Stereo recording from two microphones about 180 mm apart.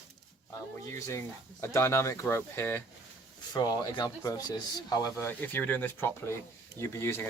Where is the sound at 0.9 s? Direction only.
15° left (ahead or behind).